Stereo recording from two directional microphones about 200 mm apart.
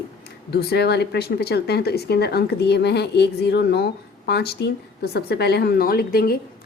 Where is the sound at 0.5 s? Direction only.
55° left (ahead or behind).